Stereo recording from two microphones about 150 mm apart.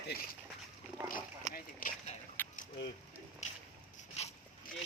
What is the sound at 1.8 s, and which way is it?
Speech, 70° left (ahead or behind).